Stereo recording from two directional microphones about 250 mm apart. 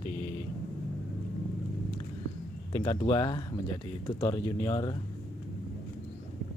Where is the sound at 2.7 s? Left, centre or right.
Left.